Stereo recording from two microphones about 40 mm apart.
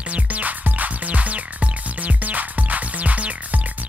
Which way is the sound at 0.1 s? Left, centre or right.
Right.